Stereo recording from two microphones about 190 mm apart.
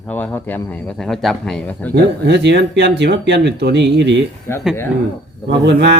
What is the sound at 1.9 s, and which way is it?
Speech, 60° right (ahead or behind).